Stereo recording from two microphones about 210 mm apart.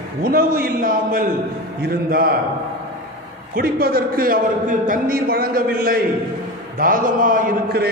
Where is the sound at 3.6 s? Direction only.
45° right (ahead or behind).